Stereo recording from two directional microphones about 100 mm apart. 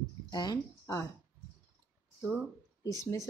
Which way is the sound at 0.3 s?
40° left (ahead or behind).